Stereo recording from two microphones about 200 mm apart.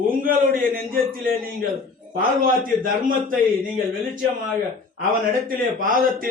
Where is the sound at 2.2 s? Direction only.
45° right (ahead or behind).